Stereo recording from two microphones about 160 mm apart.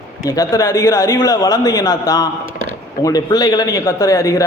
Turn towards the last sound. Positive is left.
turn(degrees=20)  # may be behind; listen again after turning